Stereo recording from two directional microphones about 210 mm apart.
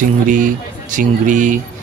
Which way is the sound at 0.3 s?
40° right (ahead or behind).